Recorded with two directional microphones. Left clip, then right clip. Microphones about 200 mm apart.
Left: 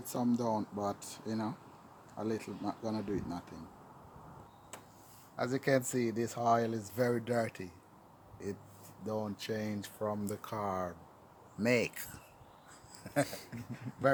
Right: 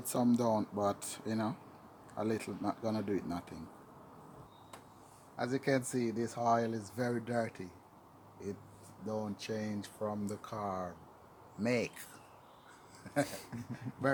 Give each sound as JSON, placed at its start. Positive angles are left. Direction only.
{"t": 0.0, "sound": "speech", "side_deg": -25}
{"t": 5.4, "sound": "speech", "side_deg": 30}
{"t": 13.2, "sound": "speech", "side_deg": 0}